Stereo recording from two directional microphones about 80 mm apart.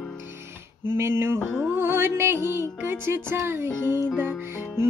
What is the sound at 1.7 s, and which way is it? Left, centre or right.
Music, right.